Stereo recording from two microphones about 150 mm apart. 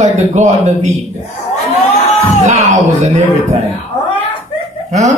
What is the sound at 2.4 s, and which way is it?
A man's voice, 55° right (ahead or behind).